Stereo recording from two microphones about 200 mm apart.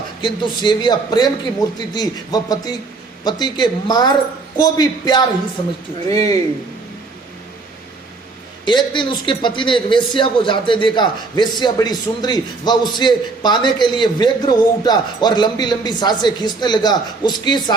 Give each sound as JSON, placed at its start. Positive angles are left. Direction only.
{"t": 0.2, "sound": "a man's voice", "side_deg": 25}
{"t": 8.6, "sound": "a man's voice", "side_deg": 25}